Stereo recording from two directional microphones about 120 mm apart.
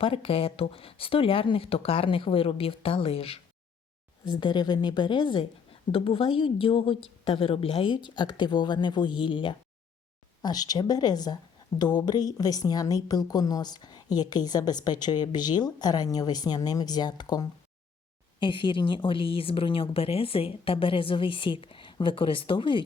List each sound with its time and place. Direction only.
0.0 s a woman's voice: 50° left (ahead or behind)
4.3 s a woman's voice: 40° left (ahead or behind)